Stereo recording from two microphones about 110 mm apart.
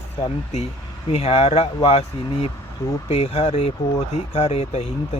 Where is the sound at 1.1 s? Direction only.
65° left (ahead or behind).